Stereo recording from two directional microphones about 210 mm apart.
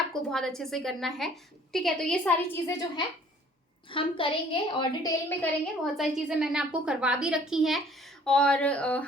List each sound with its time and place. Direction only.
0.1 s a woman's voice: centre (ahead or behind); by 5.1 s 20° left (ahead or behind)
5.4 s a woman's voice: centre (ahead or behind)